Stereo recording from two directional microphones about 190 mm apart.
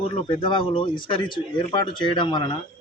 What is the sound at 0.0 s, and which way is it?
Speech, 30° left (ahead or behind).